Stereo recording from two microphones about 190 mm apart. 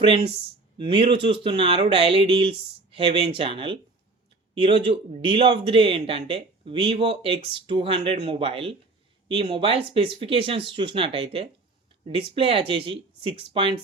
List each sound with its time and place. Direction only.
0.0 s speech: 25° right (ahead or behind)